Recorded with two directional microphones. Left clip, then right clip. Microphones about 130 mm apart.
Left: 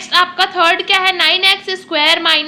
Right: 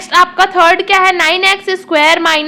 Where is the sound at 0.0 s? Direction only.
40° right (ahead or behind).